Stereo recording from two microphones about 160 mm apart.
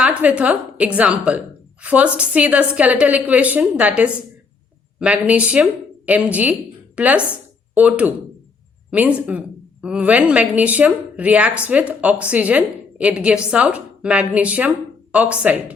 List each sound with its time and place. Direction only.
0.0 s a woman's voice: 10° right (ahead or behind)